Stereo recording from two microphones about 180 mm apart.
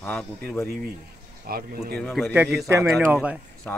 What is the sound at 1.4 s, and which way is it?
Speech, 55° right (ahead or behind).